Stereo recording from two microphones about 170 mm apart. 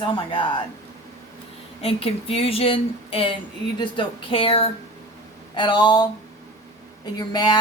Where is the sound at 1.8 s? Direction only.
35° left (ahead or behind).